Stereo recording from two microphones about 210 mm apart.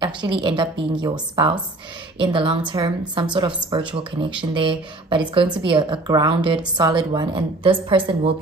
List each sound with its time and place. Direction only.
0.0 s a woman's voice: 20° right (ahead or behind)